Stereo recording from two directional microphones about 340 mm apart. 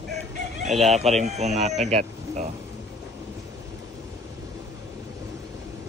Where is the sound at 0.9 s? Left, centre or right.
Centre.